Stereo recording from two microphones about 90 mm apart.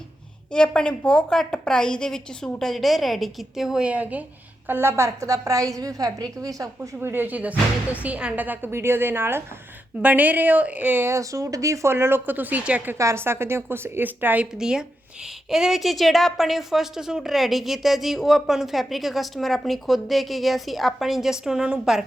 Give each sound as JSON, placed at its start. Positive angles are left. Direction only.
{"t": 0.5, "sound": "a woman's voice", "side_deg": 10}
{"t": 4.7, "sound": "a woman's voice", "side_deg": -25}
{"t": 7.0, "sound": "speech", "side_deg": -20}
{"t": 13.0, "sound": "speech", "side_deg": -30}
{"t": 14.6, "sound": "a woman's voice", "side_deg": -5}